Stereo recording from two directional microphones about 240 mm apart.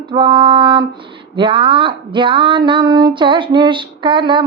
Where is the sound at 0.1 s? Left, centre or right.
Centre.